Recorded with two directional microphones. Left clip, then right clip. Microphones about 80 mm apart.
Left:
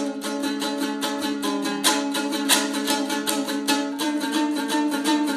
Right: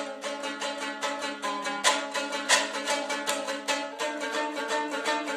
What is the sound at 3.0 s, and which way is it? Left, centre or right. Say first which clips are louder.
Music: left 4 dB; right.